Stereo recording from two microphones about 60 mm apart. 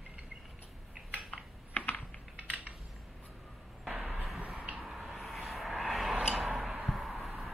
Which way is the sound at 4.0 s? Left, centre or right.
Centre.